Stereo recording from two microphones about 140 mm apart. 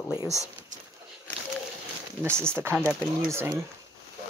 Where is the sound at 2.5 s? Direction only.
15° right (ahead or behind).